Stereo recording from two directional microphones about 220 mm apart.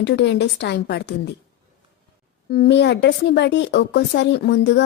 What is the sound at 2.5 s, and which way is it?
A woman's voice, 50° left (ahead or behind).